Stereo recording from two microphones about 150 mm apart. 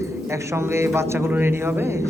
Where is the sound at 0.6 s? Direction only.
15° right (ahead or behind).